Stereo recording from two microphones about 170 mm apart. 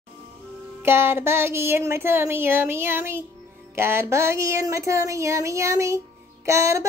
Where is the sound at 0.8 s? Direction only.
15° right (ahead or behind).